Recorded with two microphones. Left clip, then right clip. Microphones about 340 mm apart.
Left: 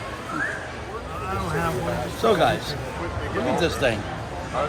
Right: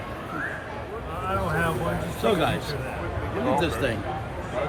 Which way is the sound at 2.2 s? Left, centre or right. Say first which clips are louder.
Left 4 dB; centre.